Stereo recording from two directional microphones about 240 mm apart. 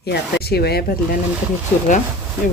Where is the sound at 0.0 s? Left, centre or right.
Left.